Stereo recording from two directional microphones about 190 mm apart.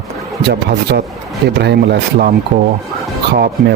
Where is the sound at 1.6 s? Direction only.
60° right (ahead or behind).